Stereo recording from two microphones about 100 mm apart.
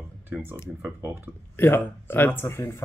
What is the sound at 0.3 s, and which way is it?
Speech, 15° right (ahead or behind).